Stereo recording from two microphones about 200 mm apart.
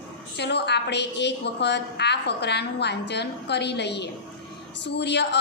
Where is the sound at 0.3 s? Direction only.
55° left (ahead or behind).